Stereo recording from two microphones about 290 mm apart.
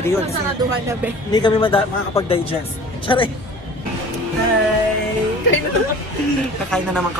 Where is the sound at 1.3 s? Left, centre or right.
Centre.